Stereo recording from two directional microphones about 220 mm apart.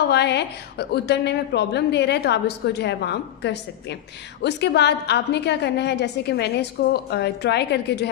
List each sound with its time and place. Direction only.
0.1 s a woman's voice: 50° left (ahead or behind)